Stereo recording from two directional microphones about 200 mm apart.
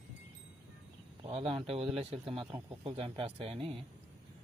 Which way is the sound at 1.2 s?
30° right (ahead or behind).